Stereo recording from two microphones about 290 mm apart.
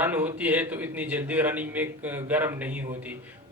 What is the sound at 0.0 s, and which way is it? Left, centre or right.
A man's voice, centre.